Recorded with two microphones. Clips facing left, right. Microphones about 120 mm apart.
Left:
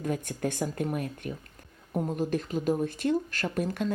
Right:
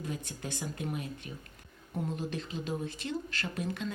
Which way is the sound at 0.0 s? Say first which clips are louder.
Left 9 dB; 50° left (ahead or behind).